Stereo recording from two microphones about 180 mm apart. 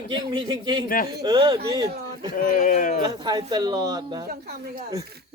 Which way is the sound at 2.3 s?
50° left (ahead or behind).